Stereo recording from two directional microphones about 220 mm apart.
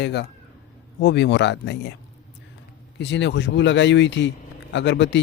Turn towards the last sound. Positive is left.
turn(degrees=55)  # may be behind; listen again after turning